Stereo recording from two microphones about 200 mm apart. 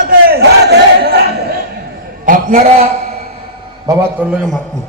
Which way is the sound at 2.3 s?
45° right (ahead or behind).